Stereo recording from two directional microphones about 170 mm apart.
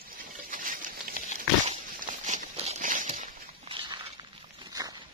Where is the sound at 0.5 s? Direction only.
55° right (ahead or behind).